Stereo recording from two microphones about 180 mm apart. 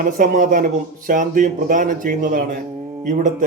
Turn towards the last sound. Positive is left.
turn(degrees=-45)  # may be behind; listen again after turning